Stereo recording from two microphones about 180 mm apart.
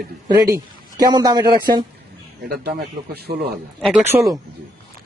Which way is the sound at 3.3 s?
40° right (ahead or behind).